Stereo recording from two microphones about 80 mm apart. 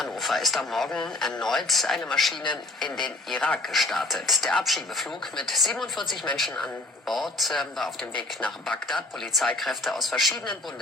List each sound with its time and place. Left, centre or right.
0.0 s speech: centre
2.4 s a man's voice: left
3.3 s speech: centre
3.7 s speech: centre
9.6 s speech: centre